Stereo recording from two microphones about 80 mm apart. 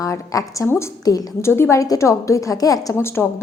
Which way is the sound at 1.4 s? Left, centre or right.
Left.